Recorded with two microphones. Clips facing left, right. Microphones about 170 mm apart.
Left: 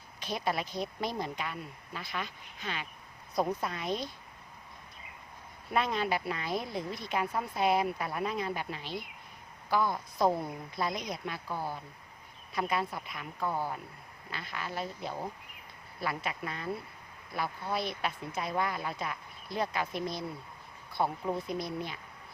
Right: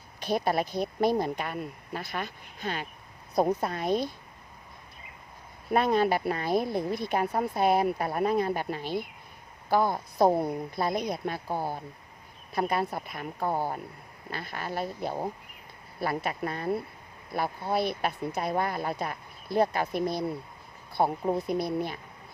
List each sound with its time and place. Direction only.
0.3 s speech: 50° right (ahead or behind)
1.1 s speech: 45° right (ahead or behind)
5.7 s speech: 45° right (ahead or behind)
10.8 s speech: 60° right (ahead or behind)
11.3 s speech: 40° right (ahead or behind)
18.4 s speech: 45° right (ahead or behind)
21.2 s speech: 40° right (ahead or behind)